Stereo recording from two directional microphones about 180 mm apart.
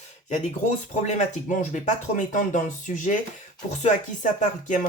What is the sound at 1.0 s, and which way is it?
Speech, 45° left (ahead or behind).